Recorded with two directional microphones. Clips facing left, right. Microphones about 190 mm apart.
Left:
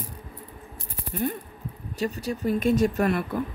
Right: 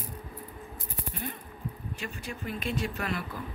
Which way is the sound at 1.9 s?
40° left (ahead or behind).